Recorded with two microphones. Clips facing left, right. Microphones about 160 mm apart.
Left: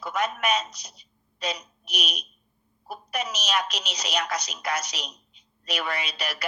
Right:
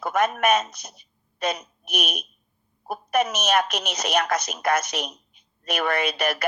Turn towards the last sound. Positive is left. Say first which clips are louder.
# right 9 dB
turn(degrees=-50)  # may be behind; listen again after turning